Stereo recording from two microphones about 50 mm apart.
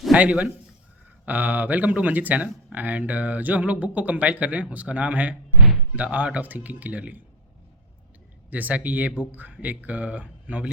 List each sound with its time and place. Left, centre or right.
0.1 s a man's voice: right
8.4 s speech: right